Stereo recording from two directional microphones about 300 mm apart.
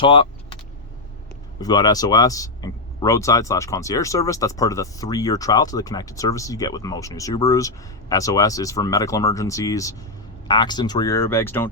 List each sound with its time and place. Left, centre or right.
0.0 s speech: centre
1.6 s speech: centre